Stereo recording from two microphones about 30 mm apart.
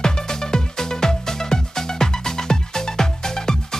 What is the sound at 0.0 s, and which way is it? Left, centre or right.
Music, centre.